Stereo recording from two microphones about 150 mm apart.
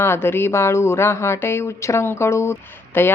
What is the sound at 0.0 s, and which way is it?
Speech, 15° left (ahead or behind).